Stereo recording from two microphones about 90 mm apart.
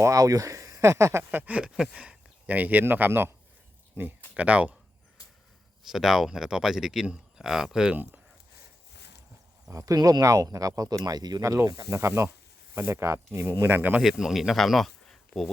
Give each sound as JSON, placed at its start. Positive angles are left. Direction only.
{"t": 0.0, "sound": "speech", "side_deg": -40}
{"t": 1.3, "sound": "speech", "side_deg": -20}
{"t": 4.4, "sound": "speech", "side_deg": -15}
{"t": 5.9, "sound": "speech", "side_deg": -5}
{"t": 9.6, "sound": "speech", "side_deg": -40}
{"t": 11.4, "sound": "speech", "side_deg": -35}
{"t": 14.0, "sound": "speech", "side_deg": -5}